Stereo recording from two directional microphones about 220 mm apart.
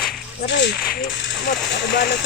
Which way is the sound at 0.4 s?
55° left (ahead or behind).